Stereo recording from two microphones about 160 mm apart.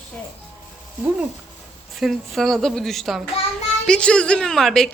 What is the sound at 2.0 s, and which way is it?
A child's voice, centre (ahead or behind).